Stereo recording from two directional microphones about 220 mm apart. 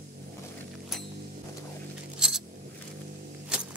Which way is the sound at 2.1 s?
Centre (ahead or behind).